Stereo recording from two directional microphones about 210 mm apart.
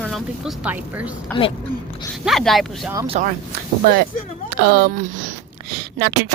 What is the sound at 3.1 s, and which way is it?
Speech, 35° right (ahead or behind).